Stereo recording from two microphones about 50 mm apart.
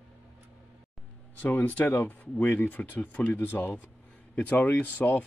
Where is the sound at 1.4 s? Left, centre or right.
Left.